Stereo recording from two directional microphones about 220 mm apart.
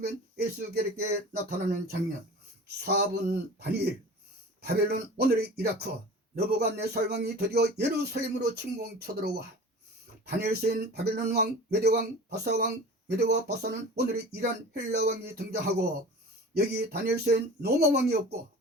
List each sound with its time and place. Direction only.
0.0 s speech: 45° right (ahead or behind)
2.6 s speech: 50° right (ahead or behind)